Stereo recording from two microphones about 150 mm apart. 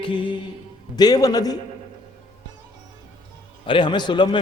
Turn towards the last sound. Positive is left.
turn(degrees=30)  # may be behind; listen again after turning